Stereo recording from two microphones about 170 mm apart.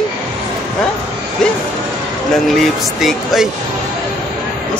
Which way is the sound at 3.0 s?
Centre (ahead or behind).